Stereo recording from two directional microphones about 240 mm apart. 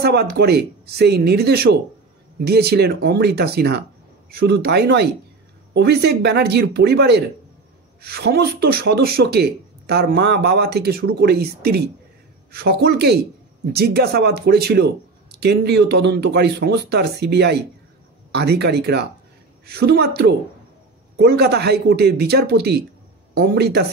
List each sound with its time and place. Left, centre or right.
0.0 s speech: right